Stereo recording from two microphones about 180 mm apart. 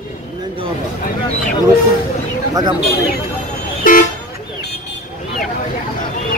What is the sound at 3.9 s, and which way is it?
Vehicle, 50° left (ahead or behind).